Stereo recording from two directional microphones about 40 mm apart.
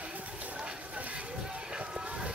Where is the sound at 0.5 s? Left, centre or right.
Right.